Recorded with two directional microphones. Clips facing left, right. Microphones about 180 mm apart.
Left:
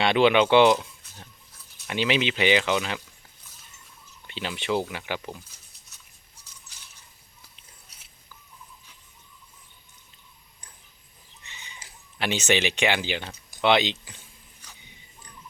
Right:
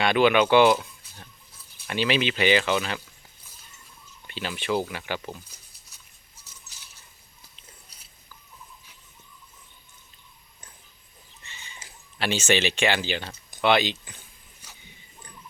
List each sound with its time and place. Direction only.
0.0 s speech: 25° left (ahead or behind)
0.8 s a sound: centre (ahead or behind)
1.9 s speech: 20° left (ahead or behind)
4.3 s speech: 20° left (ahead or behind)
11.4 s speech: 15° left (ahead or behind)